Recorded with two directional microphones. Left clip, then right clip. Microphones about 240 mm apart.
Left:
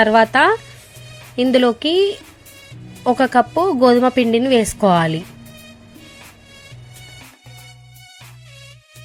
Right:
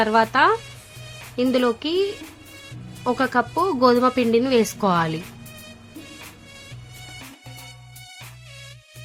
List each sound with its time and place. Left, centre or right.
0.0 s a woman's voice: centre